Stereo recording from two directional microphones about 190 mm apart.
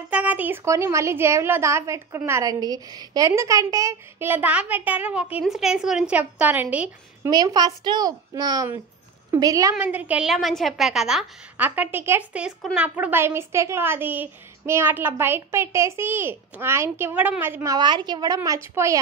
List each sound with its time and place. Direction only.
0.1 s a woman's voice: 10° right (ahead or behind)
7.2 s a woman's voice: 20° right (ahead or behind)
9.8 s a woman's voice: 5° right (ahead or behind)